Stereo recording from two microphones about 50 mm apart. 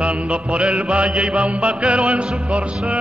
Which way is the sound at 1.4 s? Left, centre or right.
Right.